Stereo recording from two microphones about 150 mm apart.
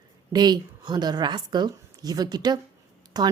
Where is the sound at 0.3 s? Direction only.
25° right (ahead or behind).